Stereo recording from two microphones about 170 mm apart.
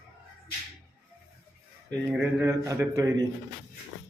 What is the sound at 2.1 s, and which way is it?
A man's voice, 10° right (ahead or behind).